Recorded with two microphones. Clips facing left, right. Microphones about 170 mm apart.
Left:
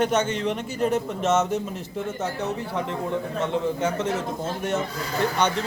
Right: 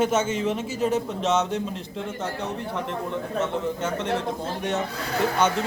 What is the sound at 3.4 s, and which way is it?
A man's voice, 10° left (ahead or behind).